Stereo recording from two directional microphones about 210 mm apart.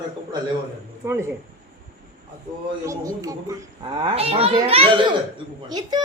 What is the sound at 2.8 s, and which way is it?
A woman's voice, 15° right (ahead or behind).